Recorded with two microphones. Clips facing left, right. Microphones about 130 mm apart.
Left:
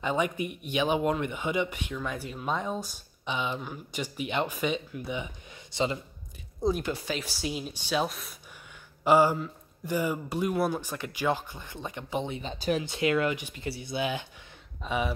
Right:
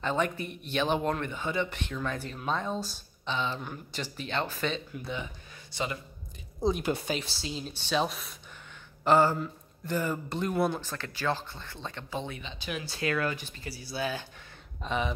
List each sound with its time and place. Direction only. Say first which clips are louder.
0.0 s speech: left 1 dB; 10° left (ahead or behind)
6.9 s speech: right 2 dB; 55° right (ahead or behind)
7.2 s speech: left 3 dB; 15° left (ahead or behind)
12.4 s speech: left 8 dB; 40° left (ahead or behind)
12.8 s speech: even; 20° left (ahead or behind)
14.8 s speech: left 1 dB; 5° left (ahead or behind)